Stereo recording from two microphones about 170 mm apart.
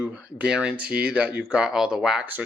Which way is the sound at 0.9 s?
65° right (ahead or behind).